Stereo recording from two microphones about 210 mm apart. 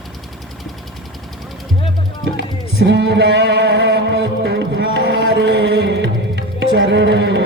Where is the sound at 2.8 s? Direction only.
55° right (ahead or behind).